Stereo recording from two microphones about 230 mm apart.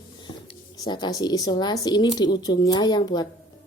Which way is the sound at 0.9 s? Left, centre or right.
Centre.